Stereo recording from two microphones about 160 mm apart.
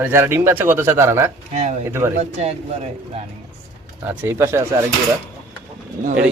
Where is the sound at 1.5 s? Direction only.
45° right (ahead or behind).